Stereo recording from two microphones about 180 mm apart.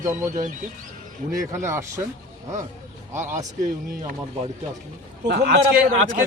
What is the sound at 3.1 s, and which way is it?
Speech, 15° right (ahead or behind).